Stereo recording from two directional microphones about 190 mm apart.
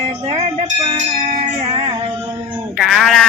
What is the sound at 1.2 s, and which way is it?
Wind chime, 35° right (ahead or behind).